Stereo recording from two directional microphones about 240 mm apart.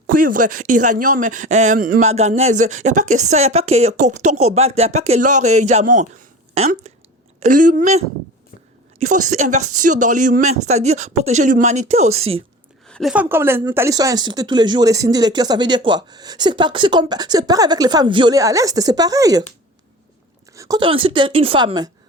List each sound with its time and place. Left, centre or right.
0.1 s a sound: right
0.3 s a woman's voice: right
12.9 s a woman's voice: centre
20.5 s speech: centre